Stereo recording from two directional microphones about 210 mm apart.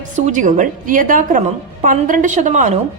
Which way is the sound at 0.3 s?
35° right (ahead or behind).